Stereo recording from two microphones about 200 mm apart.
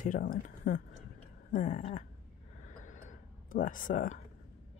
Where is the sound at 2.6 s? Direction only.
40° left (ahead or behind).